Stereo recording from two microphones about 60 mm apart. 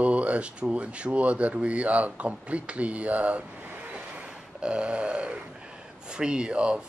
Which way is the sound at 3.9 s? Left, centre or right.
Centre.